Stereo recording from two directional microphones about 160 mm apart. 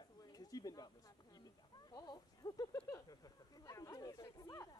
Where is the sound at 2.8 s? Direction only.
20° left (ahead or behind).